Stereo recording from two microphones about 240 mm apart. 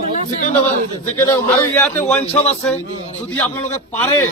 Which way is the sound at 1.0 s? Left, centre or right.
Centre.